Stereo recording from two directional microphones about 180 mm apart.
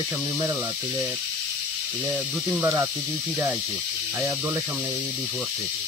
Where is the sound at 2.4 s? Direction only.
10° right (ahead or behind).